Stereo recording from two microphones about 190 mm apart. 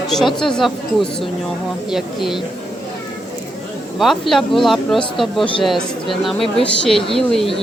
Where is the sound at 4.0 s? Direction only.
Centre (ahead or behind).